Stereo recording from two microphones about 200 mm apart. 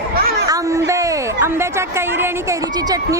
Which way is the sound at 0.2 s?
50° right (ahead or behind).